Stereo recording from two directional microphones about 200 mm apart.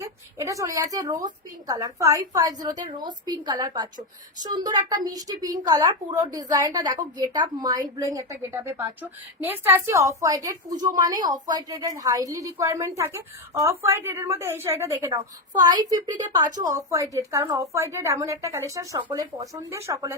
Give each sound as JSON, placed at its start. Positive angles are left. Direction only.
{"t": 0.3, "sound": "a woman's voice", "side_deg": -15}